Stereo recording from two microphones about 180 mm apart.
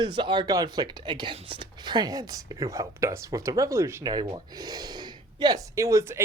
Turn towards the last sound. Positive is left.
turn(degrees=-15)  # may be behind; listen again after turning